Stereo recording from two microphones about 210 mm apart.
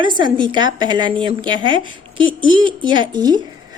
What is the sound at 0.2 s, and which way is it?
A woman's voice, 20° right (ahead or behind).